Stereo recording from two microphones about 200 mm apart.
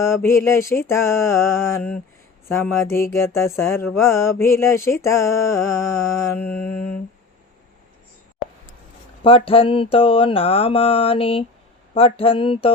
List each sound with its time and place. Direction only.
0.0 s mantra: 15° left (ahead or behind)
9.2 s mantra: 25° left (ahead or behind)